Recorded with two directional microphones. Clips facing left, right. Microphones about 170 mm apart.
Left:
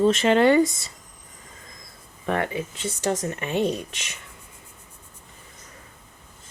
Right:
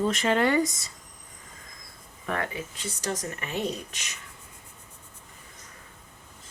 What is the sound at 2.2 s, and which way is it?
Speech, 25° left (ahead or behind).